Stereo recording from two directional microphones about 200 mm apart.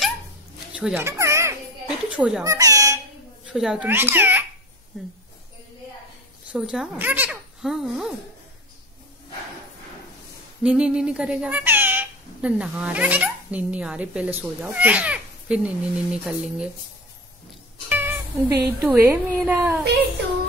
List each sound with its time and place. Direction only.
0.7 s music: 10° right (ahead or behind)
2.0 s a child's voice: 5° right (ahead or behind)
2.4 s speech: 15° right (ahead or behind)
3.4 s a child's voice: 5° right (ahead or behind)
6.5 s a child's voice: 5° right (ahead or behind)
10.6 s speech: 5° right (ahead or behind)
17.8 s cat: 10° right (ahead or behind)
18.6 s speech: 10° right (ahead or behind)